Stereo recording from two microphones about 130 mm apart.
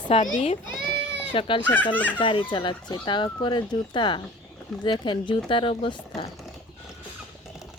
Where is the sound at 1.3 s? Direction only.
40° left (ahead or behind).